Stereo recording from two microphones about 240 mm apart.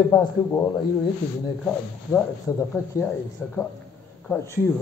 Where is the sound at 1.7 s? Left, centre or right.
Centre.